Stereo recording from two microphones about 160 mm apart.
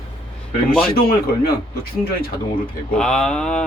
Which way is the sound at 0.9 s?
70° left (ahead or behind).